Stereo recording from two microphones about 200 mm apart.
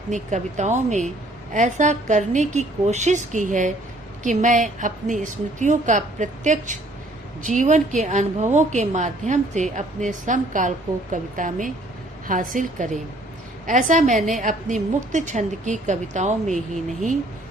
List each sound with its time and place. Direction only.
0.1 s a woman's voice: 35° right (ahead or behind)